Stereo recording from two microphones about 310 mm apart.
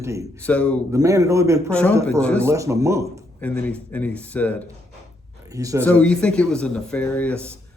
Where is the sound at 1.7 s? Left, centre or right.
Centre.